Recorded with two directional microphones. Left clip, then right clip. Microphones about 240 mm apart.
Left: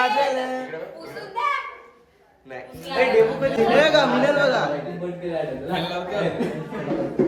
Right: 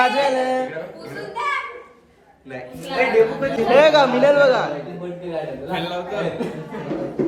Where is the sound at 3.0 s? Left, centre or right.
Centre.